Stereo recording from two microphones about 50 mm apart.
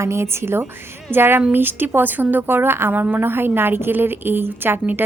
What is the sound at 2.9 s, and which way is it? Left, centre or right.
A woman's voice, right.